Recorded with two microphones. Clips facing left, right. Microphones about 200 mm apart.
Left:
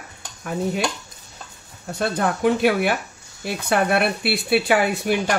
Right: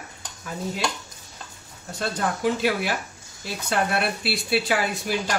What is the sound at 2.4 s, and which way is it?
Speech, 60° left (ahead or behind).